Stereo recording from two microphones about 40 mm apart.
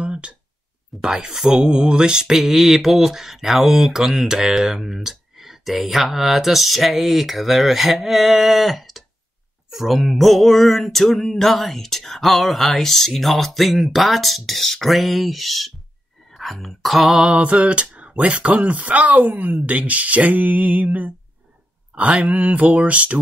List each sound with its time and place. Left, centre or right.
0.0 s a sound: right
1.0 s speech: centre
17.3 s mantra: right
18.6 s speech: right
22.2 s speech: right